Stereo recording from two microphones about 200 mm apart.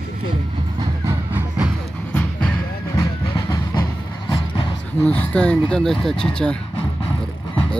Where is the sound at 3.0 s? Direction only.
15° left (ahead or behind).